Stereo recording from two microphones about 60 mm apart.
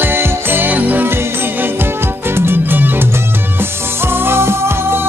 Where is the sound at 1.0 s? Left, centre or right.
Right.